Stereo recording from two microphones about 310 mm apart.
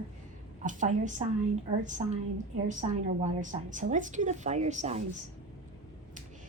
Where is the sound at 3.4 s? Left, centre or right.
Right.